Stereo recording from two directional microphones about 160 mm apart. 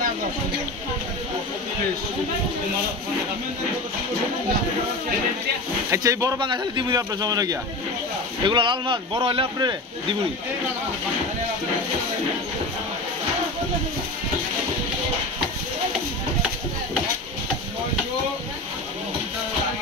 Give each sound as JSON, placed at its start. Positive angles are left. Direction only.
{"t": 5.9, "sound": "speech", "side_deg": -20}